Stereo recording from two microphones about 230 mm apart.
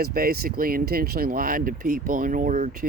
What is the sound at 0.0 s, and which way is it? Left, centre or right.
Speech, right.